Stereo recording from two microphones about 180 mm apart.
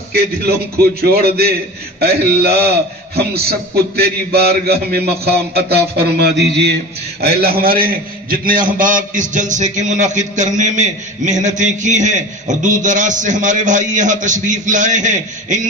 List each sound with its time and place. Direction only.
0.1 s a man's voice: 60° right (ahead or behind); by 15.6 s 45° right (ahead or behind)